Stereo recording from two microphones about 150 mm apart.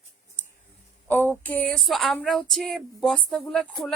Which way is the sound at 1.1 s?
15° left (ahead or behind).